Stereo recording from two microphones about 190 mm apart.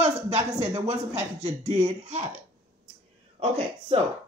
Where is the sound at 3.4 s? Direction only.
30° right (ahead or behind).